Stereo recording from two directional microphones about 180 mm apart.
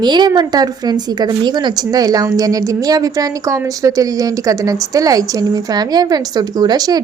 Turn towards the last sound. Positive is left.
turn(degrees=-20)  # may be behind; listen again after turning